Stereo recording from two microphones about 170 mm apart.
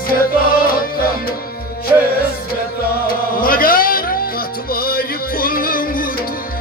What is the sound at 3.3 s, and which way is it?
Music, 55° left (ahead or behind).